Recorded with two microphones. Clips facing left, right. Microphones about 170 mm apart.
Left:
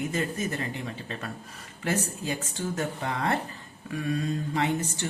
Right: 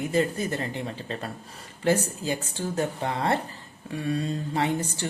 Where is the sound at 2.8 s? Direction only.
30° right (ahead or behind).